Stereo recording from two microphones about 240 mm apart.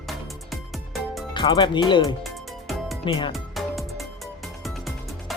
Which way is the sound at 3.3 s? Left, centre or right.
Centre.